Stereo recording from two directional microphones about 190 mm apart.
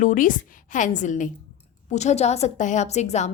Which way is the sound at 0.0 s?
45° left (ahead or behind).